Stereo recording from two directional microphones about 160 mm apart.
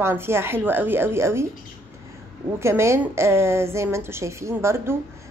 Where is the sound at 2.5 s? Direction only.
15° right (ahead or behind).